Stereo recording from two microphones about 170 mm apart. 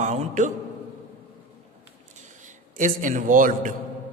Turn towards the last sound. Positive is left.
turn(degrees=-50)  # may be behind; listen again after turning